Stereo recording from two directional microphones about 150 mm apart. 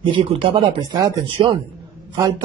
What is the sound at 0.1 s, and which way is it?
Speech, 35° right (ahead or behind).